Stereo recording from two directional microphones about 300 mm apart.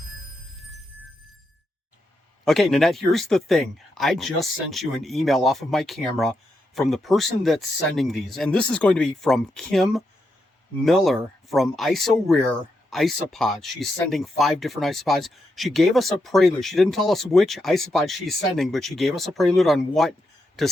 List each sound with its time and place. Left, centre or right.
0.5 s music: centre
2.4 s speech: centre